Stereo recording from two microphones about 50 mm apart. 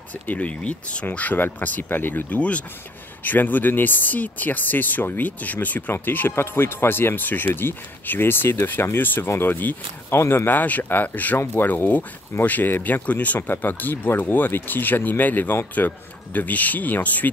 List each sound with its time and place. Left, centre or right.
0.3 s speech: left
1.0 s speech: left
2.3 s speech: left
3.3 s speech: left
10.1 s speech: left
10.4 s speech: left